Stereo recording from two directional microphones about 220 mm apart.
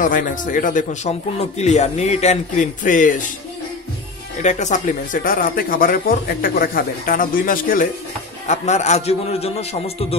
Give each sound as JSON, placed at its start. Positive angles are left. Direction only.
{"t": 0.0, "sound": "speech", "side_deg": 35}
{"t": 4.4, "sound": "a man's voice", "side_deg": 35}